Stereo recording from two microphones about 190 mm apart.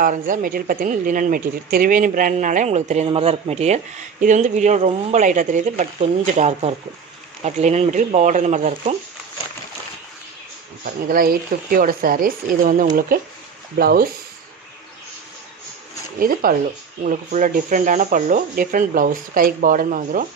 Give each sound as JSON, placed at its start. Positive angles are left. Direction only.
{"t": 0.0, "sound": "speech", "side_deg": -45}
{"t": 11.1, "sound": "speech", "side_deg": -50}
{"t": 16.2, "sound": "speech", "side_deg": -50}